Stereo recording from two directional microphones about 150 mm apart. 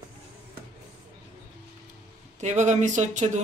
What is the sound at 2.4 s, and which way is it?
Speech, 50° right (ahead or behind).